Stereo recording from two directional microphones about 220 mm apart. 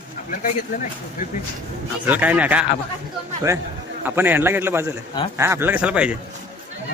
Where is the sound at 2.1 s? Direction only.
5° right (ahead or behind).